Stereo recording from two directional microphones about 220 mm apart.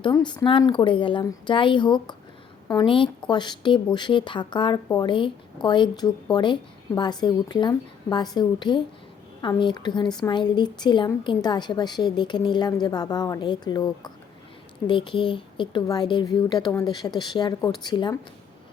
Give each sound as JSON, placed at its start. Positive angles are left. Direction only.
{"t": 0.0, "sound": "a woman's voice", "side_deg": 20}